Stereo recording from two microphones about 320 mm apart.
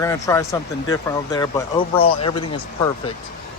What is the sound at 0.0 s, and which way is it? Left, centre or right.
Speech, centre.